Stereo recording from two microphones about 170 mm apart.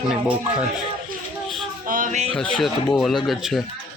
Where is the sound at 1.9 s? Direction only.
50° right (ahead or behind).